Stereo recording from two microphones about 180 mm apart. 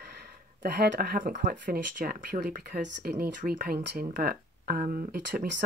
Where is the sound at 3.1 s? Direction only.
45° right (ahead or behind).